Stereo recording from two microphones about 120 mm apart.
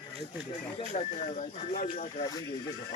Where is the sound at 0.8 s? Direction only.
60° left (ahead or behind).